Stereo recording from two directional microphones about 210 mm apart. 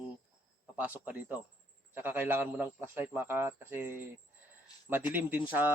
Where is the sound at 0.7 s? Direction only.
10° right (ahead or behind).